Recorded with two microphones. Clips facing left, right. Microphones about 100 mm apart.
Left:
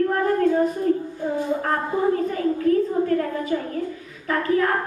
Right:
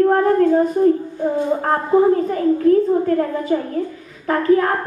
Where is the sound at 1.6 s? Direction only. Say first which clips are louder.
Right 10 dB; 30° right (ahead or behind).